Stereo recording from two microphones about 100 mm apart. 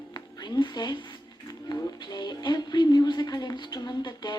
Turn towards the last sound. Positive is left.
turn(degrees=45)  # may be behind; listen again after turning